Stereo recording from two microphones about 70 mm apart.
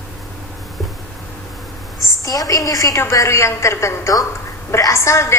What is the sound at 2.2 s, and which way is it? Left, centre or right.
A woman's voice, left.